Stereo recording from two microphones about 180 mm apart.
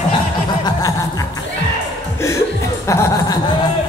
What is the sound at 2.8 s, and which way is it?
Speech, 15° left (ahead or behind).